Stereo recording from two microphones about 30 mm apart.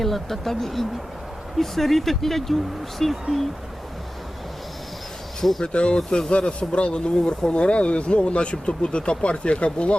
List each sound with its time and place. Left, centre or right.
0.0 s speech: centre
5.4 s speech: centre
5.6 s speech: left
6.1 s speech: left